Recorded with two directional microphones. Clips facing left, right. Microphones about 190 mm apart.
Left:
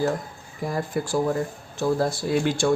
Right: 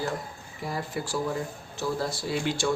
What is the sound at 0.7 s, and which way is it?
A man's voice, 50° left (ahead or behind).